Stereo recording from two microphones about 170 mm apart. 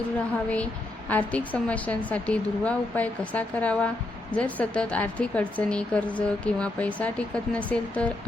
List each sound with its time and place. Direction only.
0.5 s a woman's voice: 10° left (ahead or behind)